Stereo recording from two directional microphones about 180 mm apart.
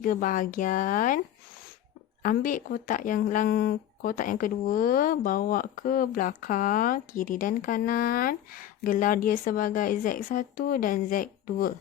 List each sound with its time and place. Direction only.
0.0 s speech: 50° left (ahead or behind)
2.2 s speech: 50° left (ahead or behind)